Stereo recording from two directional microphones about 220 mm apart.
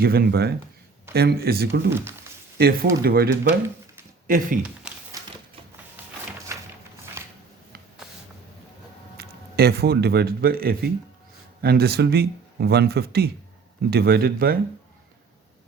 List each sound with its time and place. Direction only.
0.0 s speech: 45° right (ahead or behind)
1.9 s speech: 10° right (ahead or behind)
2.6 s speech: 45° right (ahead or behind)
4.3 s speech: 40° right (ahead or behind)
4.6 s a sound: 5° right (ahead or behind)
6.5 s a sound: 15° right (ahead or behind)
9.1 s speech: 45° right (ahead or behind)